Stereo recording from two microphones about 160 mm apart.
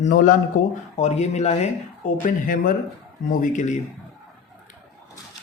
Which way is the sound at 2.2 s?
60° left (ahead or behind).